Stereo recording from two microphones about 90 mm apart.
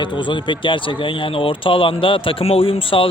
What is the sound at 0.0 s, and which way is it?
Speech, 65° left (ahead or behind).